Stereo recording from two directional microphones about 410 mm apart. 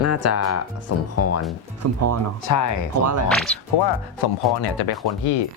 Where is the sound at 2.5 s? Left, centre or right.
Left.